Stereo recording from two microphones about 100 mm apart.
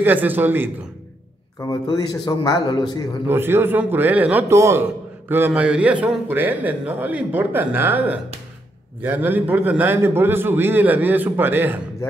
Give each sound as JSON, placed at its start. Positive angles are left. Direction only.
{"t": 0.0, "sound": "a man's voice", "side_deg": -20}
{"t": 1.6, "sound": "a man's voice", "side_deg": 40}
{"t": 3.3, "sound": "a man's voice", "side_deg": -20}
{"t": 4.5, "sound": "a man's voice", "side_deg": -30}
{"t": 5.3, "sound": "a man's voice", "side_deg": -15}